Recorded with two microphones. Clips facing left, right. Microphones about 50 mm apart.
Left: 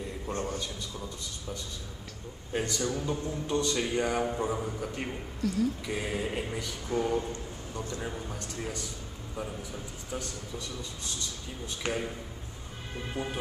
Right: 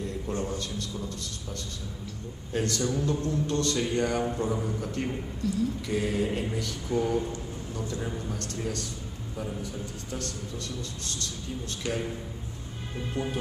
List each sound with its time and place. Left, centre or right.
0.3 s a man's voice: left
0.6 s a man's voice: centre
5.4 s a sound: left
5.9 s a man's voice: centre
11.8 s a man's voice: left
13.1 s speech: centre